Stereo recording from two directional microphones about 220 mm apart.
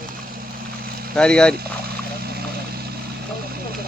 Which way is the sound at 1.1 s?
5° left (ahead or behind).